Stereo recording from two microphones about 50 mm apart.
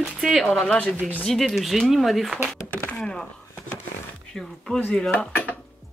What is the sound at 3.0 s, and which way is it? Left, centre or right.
Speech, centre.